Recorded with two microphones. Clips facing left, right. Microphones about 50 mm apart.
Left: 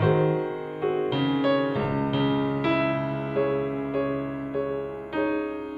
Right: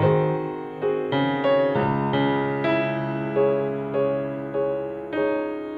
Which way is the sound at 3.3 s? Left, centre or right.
Right.